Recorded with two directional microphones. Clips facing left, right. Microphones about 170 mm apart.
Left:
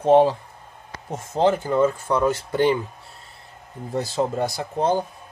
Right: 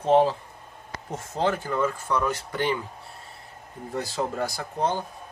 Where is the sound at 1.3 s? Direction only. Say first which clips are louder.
Left 7 dB; 25° left (ahead or behind).